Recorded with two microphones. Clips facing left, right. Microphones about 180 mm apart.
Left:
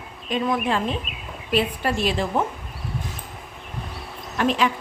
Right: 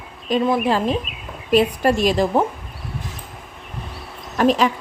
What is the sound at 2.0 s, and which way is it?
Speech, 40° right (ahead or behind).